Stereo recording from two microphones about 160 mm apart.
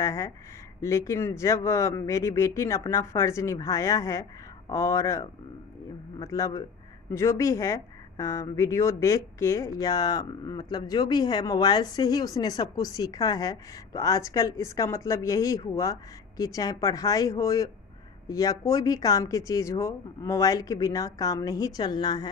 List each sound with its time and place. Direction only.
0.0 s speech: 20° left (ahead or behind)